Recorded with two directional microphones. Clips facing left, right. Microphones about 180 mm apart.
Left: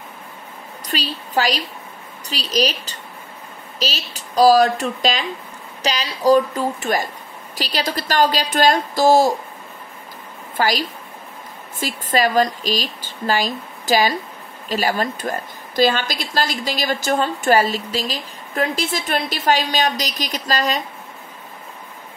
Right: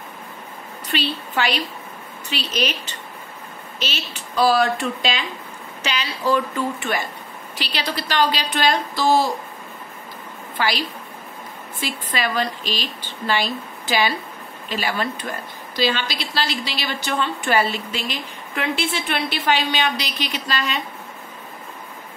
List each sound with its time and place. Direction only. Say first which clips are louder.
0.8 s a woman's voice: right 1 dB; 40° left (ahead or behind)
10.6 s a woman's voice: left 3 dB; 45° left (ahead or behind)